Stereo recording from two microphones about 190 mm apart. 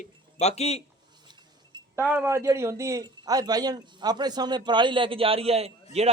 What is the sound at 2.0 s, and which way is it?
A man's voice, 10° right (ahead or behind).